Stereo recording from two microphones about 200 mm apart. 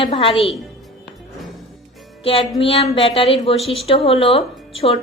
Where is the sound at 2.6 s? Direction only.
30° left (ahead or behind).